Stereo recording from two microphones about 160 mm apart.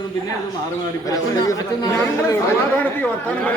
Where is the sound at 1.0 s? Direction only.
20° left (ahead or behind).